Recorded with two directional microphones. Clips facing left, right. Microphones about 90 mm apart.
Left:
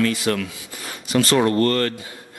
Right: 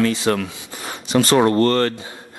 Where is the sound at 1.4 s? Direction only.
30° right (ahead or behind).